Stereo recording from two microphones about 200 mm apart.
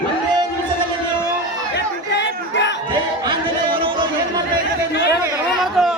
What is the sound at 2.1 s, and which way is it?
Crowd, 60° left (ahead or behind).